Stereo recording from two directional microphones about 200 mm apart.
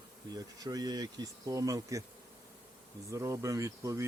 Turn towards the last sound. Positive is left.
turn(degrees=-15)  # may be behind; listen again after turning